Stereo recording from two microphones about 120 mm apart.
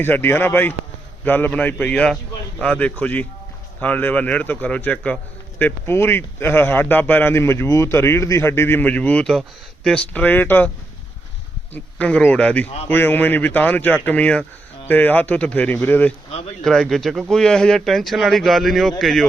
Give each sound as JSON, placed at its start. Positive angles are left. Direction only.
{"t": 0.0, "sound": "a man's voice", "side_deg": 15}
{"t": 11.7, "sound": "a man's voice", "side_deg": 10}